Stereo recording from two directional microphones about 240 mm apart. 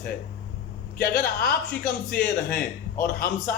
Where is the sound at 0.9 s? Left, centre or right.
Left.